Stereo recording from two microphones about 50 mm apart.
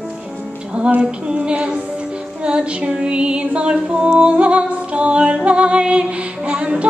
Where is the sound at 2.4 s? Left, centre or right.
Right.